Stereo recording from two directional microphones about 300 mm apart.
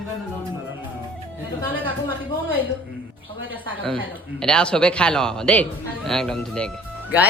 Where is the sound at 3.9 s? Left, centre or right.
Centre.